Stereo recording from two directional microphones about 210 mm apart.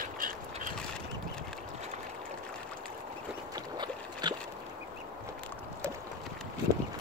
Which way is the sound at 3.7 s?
20° right (ahead or behind).